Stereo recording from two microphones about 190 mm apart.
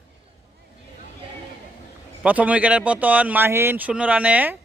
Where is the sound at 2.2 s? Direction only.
10° right (ahead or behind).